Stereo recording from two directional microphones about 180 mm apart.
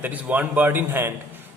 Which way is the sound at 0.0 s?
10° right (ahead or behind).